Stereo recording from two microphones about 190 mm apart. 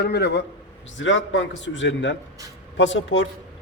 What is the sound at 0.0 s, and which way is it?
Speech, 60° left (ahead or behind).